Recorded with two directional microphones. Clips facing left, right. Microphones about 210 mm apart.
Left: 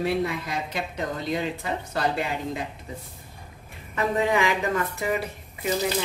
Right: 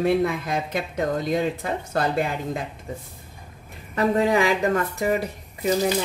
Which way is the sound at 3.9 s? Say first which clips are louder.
Right 4 dB; 40° right (ahead or behind).